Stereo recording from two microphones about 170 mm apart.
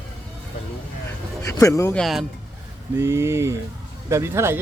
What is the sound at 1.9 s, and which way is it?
Speech, centre (ahead or behind).